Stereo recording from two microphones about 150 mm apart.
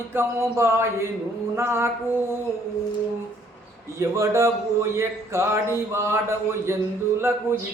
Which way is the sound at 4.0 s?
20° right (ahead or behind).